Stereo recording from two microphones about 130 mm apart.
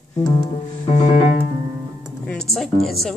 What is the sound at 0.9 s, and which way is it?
Music, 65° left (ahead or behind).